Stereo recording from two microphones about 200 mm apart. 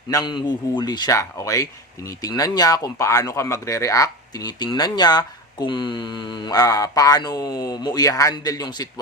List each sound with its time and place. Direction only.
0.1 s speech: 20° left (ahead or behind)